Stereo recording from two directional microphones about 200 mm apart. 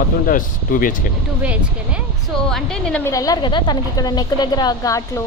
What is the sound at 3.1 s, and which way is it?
A woman's voice, 15° left (ahead or behind).